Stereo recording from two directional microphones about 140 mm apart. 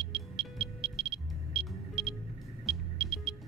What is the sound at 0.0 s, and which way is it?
Music, 40° right (ahead or behind).